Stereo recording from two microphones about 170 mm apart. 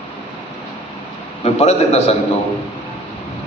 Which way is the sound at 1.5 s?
40° left (ahead or behind).